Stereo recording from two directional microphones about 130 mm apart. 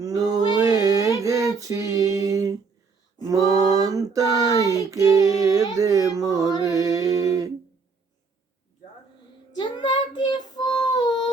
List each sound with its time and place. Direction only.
0.0 s a sound: 30° right (ahead or behind)
3.3 s mantra: 30° right (ahead or behind)
4.5 s child singing: 25° left (ahead or behind)
4.9 s female singing: 25° right (ahead or behind)
6.7 s a sound: 25° right (ahead or behind)
9.6 s child singing: 35° left (ahead or behind)